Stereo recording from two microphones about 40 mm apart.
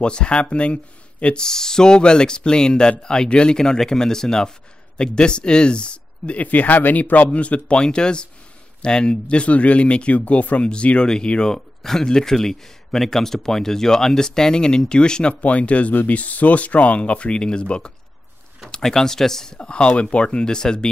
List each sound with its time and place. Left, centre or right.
0.0 s speech: left
1.3 s speech: centre; by 7.2 s left
7.3 s speech: left
10.7 s speech: left
15.4 s speech: left
18.7 s speech: centre
20.0 s speech: left